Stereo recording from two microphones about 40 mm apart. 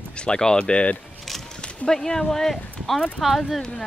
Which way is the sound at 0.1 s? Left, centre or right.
Left.